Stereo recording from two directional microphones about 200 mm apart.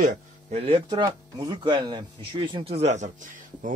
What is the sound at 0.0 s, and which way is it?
A man's voice, 40° right (ahead or behind).